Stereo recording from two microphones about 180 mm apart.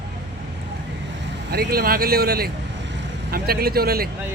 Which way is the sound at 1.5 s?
55° right (ahead or behind).